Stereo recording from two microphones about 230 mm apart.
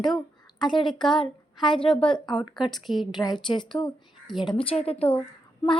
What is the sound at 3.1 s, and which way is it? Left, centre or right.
A woman's voice, centre.